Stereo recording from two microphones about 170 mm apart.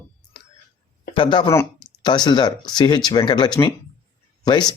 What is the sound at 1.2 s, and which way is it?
Speech, 25° left (ahead or behind).